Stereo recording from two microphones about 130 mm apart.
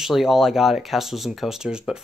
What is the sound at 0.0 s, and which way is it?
Speech, centre (ahead or behind).